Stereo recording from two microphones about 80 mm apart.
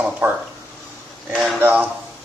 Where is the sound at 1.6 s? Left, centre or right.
Right.